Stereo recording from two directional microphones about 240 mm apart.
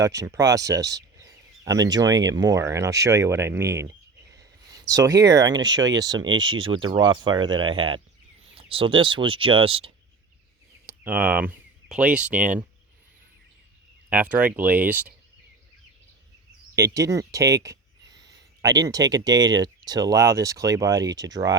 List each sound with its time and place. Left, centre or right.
0.0 s speech: centre
10.8 s speech: centre
14.1 s speech: centre
16.7 s speech: centre